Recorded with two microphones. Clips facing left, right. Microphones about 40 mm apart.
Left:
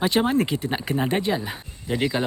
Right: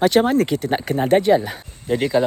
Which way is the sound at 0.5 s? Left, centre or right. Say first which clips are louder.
Right 5 dB; left.